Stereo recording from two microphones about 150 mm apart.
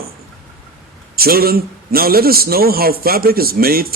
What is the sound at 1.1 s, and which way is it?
A man's voice, 90° right.